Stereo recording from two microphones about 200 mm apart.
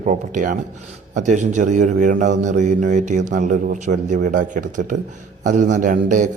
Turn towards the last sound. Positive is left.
turn(degrees=-40)  # may be behind; listen again after turning